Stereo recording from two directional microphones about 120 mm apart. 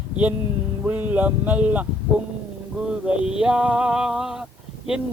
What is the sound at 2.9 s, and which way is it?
Male singing, 5° right (ahead or behind).